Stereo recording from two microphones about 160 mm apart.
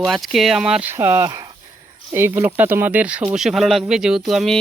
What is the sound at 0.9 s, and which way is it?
Speech, 20° right (ahead or behind).